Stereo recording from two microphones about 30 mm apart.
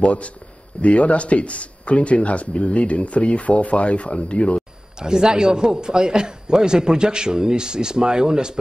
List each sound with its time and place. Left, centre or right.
0.0 s speech: left
4.9 s a man's voice: right